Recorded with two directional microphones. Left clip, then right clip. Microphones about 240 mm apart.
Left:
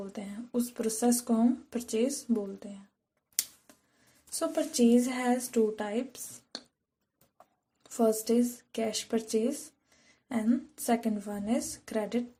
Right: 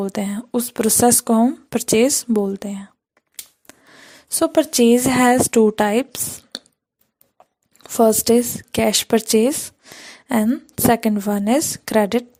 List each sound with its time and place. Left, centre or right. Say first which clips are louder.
0.0 s speech: right 17 dB; right
4.4 s a woman's voice: right 13 dB; right